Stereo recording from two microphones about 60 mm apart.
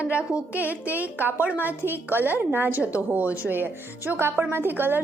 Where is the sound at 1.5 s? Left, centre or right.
Left.